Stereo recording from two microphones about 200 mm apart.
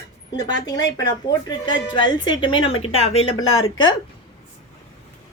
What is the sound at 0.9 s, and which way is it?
Speech, 15° left (ahead or behind).